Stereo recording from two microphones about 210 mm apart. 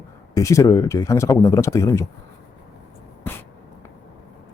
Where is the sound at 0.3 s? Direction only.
15° left (ahead or behind).